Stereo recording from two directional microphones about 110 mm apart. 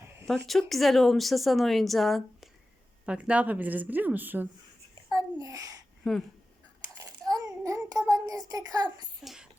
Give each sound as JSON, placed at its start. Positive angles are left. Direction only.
{"t": 0.3, "sound": "a woman's voice", "side_deg": 0}
{"t": 3.1, "sound": "speech", "side_deg": -10}
{"t": 5.1, "sound": "a sound", "side_deg": -30}
{"t": 6.0, "sound": "a woman's voice", "side_deg": 0}
{"t": 7.3, "sound": "child singing", "side_deg": -30}
{"t": 9.2, "sound": "a sound", "side_deg": -5}